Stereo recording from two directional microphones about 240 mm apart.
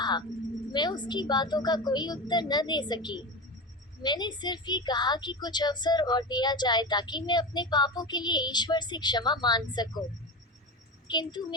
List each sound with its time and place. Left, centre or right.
0.0 s a sound: centre
0.7 s a woman's voice: centre
11.1 s a woman's voice: centre